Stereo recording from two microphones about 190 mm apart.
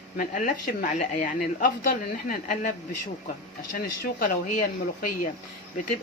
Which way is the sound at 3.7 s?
50° left (ahead or behind).